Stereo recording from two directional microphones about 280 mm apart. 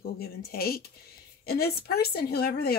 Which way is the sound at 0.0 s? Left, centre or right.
Left.